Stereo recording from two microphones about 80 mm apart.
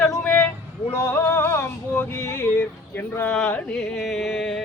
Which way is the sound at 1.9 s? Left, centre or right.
Left.